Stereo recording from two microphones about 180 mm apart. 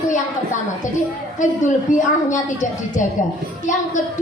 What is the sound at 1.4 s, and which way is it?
A woman's voice, 45° left (ahead or behind).